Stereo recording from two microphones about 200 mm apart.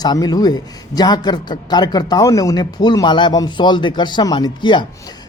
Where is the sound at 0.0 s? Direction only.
20° left (ahead or behind).